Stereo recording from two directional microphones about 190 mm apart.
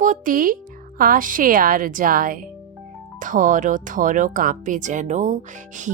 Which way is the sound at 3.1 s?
45° right (ahead or behind).